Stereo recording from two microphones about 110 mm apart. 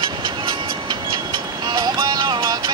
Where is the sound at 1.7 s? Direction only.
40° right (ahead or behind).